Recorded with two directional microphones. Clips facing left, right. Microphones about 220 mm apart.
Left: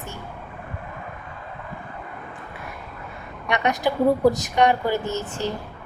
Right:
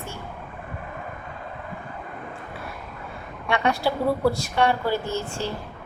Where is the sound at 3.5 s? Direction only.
20° left (ahead or behind).